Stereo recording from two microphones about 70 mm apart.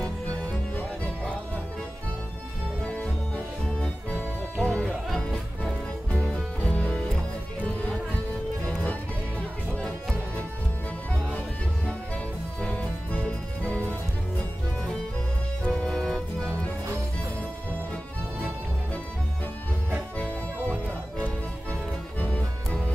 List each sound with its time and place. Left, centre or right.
0.0 s music: centre
2.8 s music: centre
4.8 s music: centre
5.3 s music: centre
9.8 s music: centre
12.5 s music: centre
15.6 s music: centre
22.2 s music: centre